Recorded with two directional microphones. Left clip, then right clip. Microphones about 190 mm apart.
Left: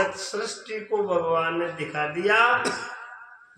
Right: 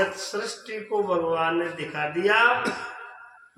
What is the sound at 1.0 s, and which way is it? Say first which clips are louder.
A man's voice: left 1 dB; 20° right (ahead or behind).